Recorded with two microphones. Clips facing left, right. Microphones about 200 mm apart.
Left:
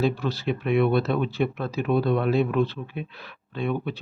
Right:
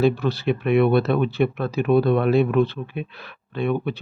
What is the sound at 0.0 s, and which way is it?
Speech, 65° right (ahead or behind).